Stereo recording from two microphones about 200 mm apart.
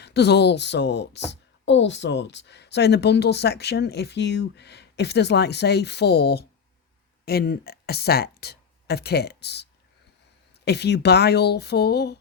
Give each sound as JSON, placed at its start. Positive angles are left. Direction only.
{"t": 0.0, "sound": "speech", "side_deg": 60}
{"t": 10.7, "sound": "speech", "side_deg": 60}